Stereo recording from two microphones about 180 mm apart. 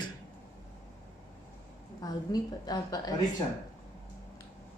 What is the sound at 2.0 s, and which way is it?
Speech, 20° left (ahead or behind).